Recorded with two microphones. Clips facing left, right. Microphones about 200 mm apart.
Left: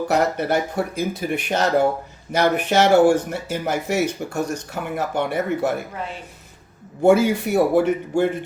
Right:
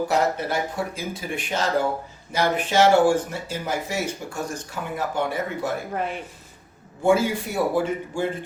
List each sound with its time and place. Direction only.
0.1 s speech: 60° left (ahead or behind)
5.9 s speech: 60° right (ahead or behind)
7.0 s speech: 65° left (ahead or behind)